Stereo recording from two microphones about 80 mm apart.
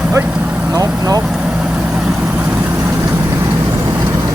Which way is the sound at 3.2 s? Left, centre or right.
Right.